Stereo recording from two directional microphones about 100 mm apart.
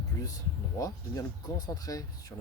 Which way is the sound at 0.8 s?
35° left (ahead or behind).